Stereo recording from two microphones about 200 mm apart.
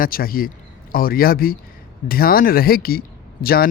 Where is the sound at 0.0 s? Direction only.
45° left (ahead or behind).